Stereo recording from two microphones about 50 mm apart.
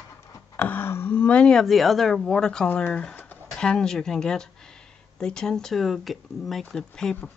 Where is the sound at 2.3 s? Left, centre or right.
Centre.